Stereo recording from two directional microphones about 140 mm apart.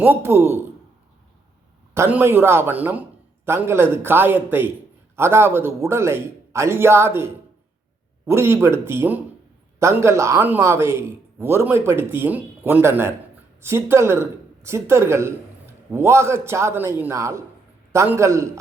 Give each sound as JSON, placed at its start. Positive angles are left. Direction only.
{"t": 0.0, "sound": "speech", "side_deg": -15}
{"t": 2.0, "sound": "a man's voice", "side_deg": -15}